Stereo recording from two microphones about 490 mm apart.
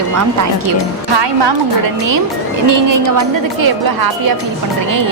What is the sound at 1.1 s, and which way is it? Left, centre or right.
Speech, right.